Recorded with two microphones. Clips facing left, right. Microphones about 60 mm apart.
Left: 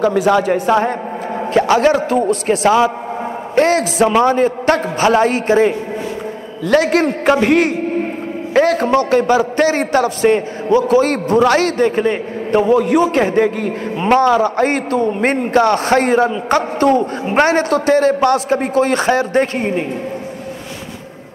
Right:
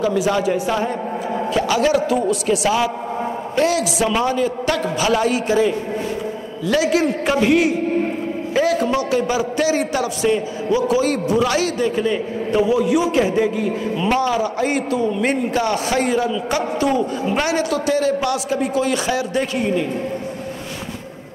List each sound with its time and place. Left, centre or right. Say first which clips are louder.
0.0 s a man's voice: left 5 dB; left